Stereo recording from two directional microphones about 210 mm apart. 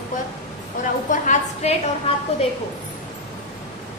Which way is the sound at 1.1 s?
35° left (ahead or behind).